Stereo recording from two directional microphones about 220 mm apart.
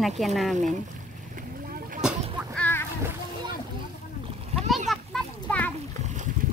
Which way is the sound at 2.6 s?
10° left (ahead or behind).